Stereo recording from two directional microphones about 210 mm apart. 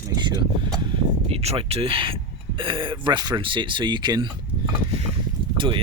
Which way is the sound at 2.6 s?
25° right (ahead or behind).